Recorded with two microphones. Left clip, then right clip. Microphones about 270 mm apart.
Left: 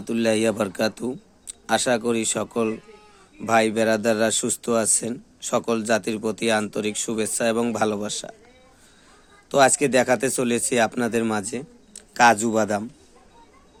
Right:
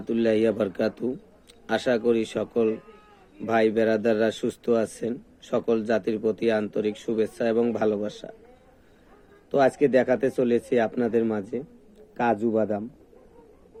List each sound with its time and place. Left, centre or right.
0.0 s speech: left
9.5 s speech: left